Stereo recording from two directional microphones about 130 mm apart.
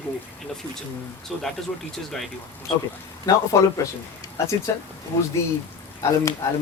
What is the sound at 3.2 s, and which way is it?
Speech, 25° left (ahead or behind).